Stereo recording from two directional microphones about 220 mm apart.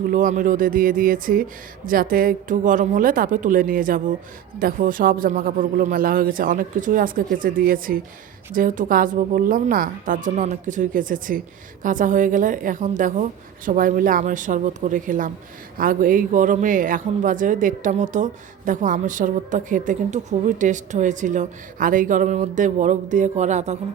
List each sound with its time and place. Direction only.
0.1 s a woman's voice: 35° right (ahead or behind)